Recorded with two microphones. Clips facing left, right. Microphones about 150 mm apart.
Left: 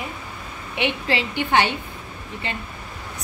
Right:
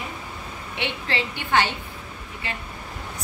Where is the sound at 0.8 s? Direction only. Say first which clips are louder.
Left 5 dB; 15° left (ahead or behind).